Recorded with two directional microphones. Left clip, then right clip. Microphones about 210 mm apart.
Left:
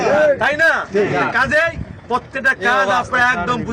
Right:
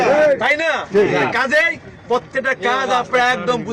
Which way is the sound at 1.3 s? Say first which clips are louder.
Even; 5° right (ahead or behind).